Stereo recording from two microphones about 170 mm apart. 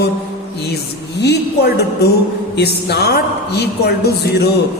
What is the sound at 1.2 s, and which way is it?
A woman's voice, 75° left (ahead or behind).